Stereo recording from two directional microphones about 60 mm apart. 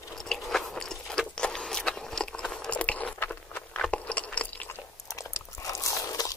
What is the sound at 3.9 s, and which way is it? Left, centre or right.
Crunch, left.